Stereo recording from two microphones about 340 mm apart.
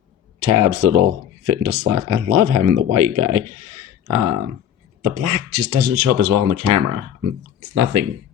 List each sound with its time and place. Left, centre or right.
0.3 s speech: right